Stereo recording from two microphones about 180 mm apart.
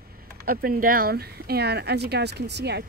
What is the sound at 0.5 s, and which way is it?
Speech, 50° right (ahead or behind).